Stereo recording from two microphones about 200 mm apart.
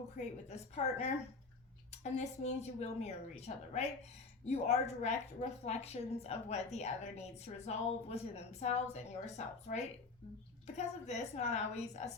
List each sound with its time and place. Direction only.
0.2 s a woman's voice: 35° left (ahead or behind)